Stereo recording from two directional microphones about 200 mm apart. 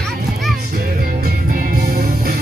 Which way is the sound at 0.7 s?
50° right (ahead or behind).